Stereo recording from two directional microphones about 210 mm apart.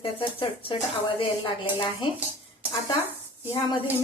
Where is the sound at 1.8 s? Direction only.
25° left (ahead or behind).